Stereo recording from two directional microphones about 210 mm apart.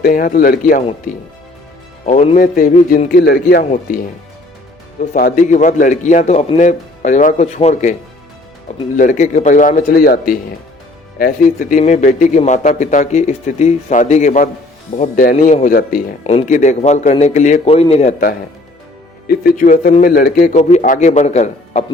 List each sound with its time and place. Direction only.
0.0 s a man's voice: 40° left (ahead or behind)
2.0 s a man's voice: 35° left (ahead or behind)
5.1 s a man's voice: 40° left (ahead or behind)
9.0 s a man's voice: 35° left (ahead or behind)
16.2 s a man's voice: 30° left (ahead or behind)
19.3 s a man's voice: 45° left (ahead or behind)